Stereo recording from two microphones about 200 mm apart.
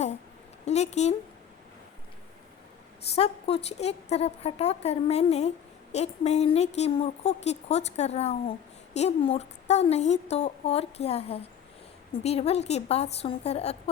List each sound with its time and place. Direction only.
0.6 s speech: 35° left (ahead or behind)
3.2 s a woman's voice: 30° left (ahead or behind)